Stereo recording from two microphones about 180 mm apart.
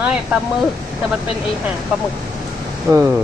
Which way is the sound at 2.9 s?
15° right (ahead or behind).